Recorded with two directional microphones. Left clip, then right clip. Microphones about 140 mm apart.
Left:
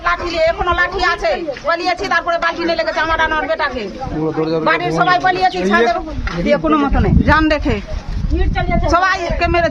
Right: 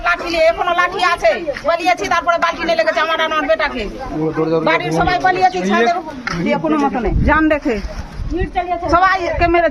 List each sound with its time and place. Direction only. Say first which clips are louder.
0.0 s speech: right 1 dB; 20° left (ahead or behind)
8.9 s a woman's voice: right 2 dB; 5° left (ahead or behind)